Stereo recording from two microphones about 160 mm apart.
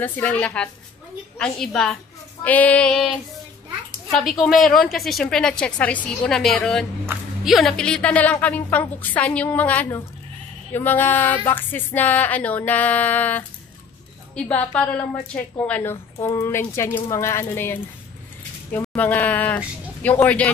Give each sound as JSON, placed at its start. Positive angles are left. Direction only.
{"t": 0.0, "sound": "a woman's voice", "side_deg": 10}